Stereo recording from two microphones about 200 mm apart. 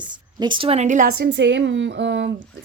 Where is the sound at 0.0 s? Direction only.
20° right (ahead or behind).